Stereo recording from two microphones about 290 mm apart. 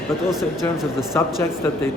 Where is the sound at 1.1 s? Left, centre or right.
Centre.